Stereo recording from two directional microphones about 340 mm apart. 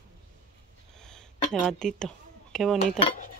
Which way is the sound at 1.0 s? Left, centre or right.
Centre.